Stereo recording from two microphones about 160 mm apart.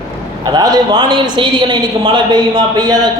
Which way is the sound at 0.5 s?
25° right (ahead or behind).